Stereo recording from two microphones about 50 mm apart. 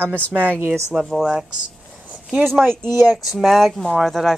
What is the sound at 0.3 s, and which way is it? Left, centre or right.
Speech, right.